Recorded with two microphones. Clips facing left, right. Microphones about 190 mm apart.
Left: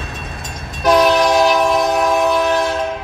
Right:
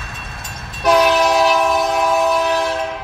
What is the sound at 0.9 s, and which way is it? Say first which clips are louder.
Train: left 1 dB; 5° right (ahead or behind).